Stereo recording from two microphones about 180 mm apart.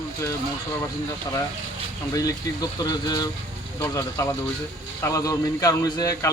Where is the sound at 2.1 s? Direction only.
20° left (ahead or behind).